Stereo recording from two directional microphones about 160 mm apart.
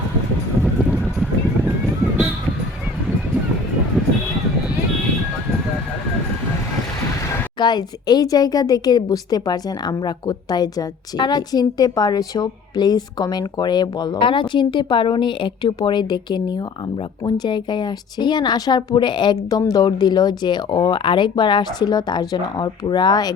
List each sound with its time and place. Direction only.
0.6 s music: centre (ahead or behind)
4.0 s music: centre (ahead or behind)
7.3 s a woman's voice: 25° left (ahead or behind)